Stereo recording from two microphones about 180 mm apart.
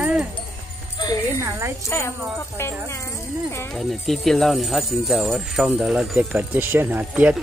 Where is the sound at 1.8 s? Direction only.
15° left (ahead or behind).